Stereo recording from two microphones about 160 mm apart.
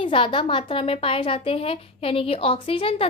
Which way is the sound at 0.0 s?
30° left (ahead or behind).